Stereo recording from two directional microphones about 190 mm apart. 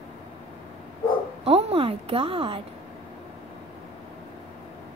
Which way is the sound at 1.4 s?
30° right (ahead or behind).